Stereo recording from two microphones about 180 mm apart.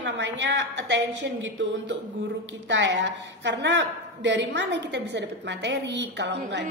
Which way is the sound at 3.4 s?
80° right.